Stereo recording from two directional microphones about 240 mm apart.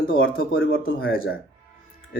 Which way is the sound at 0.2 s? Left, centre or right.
Left.